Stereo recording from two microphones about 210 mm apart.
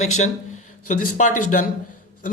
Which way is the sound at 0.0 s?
35° left (ahead or behind).